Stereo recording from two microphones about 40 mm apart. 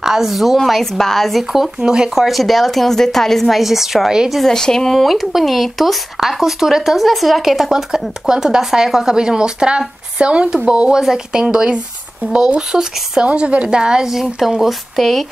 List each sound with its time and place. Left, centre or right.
0.0 s speech: centre
0.6 s a woman's voice: centre
1.8 s speech: centre
2.1 s speech: centre
4.5 s a woman's voice: centre
5.0 s speech: centre
8.3 s speech: centre
13.2 s speech: right
14.7 s speech: centre